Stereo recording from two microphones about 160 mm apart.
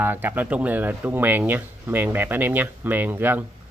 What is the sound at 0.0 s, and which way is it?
Speech, 10° right (ahead or behind).